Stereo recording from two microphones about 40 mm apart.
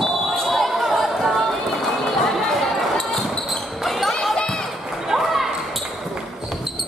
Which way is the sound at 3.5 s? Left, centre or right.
Centre.